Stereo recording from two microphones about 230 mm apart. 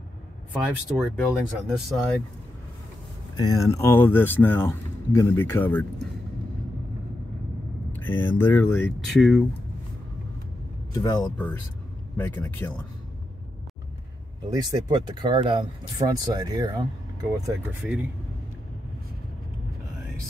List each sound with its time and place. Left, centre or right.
0.5 s speech: centre
3.3 s speech: centre
7.9 s speech: centre
10.9 s speech: centre
14.5 s speech: centre